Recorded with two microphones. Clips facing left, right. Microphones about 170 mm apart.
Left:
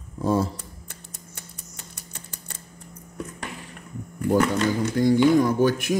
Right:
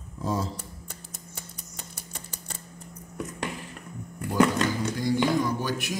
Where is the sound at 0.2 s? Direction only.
60° left (ahead or behind).